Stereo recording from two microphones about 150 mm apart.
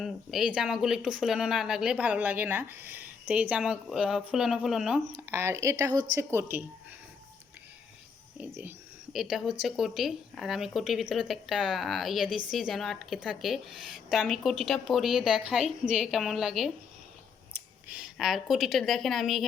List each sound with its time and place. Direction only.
0.0 s speech: centre (ahead or behind)
5.3 s speech: 15° right (ahead or behind)
8.4 s speech: 15° right (ahead or behind)
9.1 s speech: centre (ahead or behind)
17.8 s speech: 5° right (ahead or behind)